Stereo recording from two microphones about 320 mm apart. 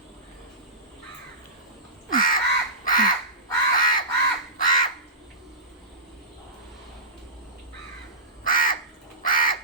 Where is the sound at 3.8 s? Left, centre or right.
Left.